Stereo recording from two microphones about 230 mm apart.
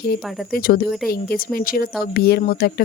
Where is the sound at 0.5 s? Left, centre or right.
Left.